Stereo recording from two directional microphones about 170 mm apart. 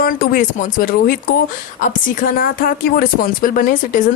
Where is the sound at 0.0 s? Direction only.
55° left (ahead or behind).